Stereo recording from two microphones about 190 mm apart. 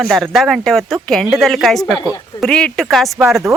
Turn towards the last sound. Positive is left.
turn(degrees=-15)  # may be behind; listen again after turning